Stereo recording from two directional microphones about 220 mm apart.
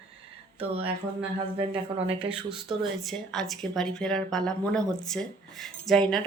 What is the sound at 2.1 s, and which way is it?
Speech, 25° right (ahead or behind).